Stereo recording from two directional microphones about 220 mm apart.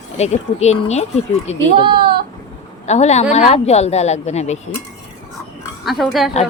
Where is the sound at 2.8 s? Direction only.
30° left (ahead or behind).